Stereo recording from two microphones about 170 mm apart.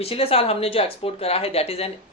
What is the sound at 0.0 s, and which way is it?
Speech, 35° left (ahead or behind).